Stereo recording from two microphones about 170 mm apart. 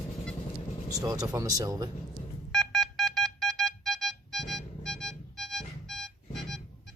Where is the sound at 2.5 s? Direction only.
Centre (ahead or behind).